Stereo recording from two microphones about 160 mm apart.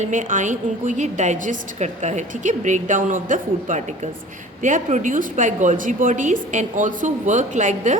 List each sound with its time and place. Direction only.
0.0 s a woman's voice: 50° right (ahead or behind)